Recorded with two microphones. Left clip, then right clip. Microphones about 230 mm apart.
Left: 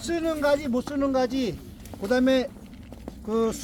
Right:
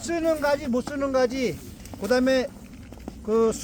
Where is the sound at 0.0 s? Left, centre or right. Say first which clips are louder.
Right 1 dB; centre.